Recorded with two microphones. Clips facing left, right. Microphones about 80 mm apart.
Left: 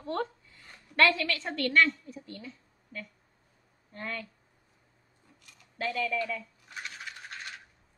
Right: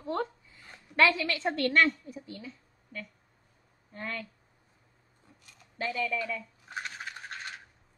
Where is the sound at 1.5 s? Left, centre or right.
Right.